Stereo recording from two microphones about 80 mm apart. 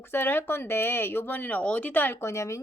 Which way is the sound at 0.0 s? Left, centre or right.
Left.